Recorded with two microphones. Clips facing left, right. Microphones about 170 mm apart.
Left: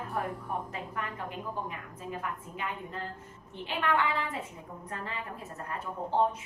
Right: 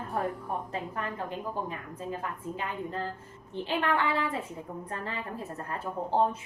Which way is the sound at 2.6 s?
30° right (ahead or behind).